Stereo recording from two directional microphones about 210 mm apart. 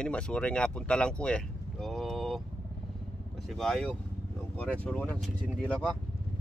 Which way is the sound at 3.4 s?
Centre (ahead or behind).